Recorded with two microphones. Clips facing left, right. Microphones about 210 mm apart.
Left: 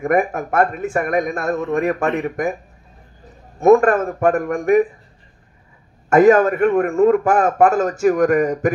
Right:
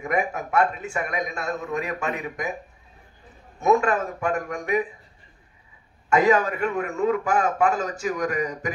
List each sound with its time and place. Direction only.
0.0 s a man's voice: 50° left (ahead or behind)
3.5 s a man's voice: 50° left (ahead or behind)
6.0 s a man's voice: 50° left (ahead or behind)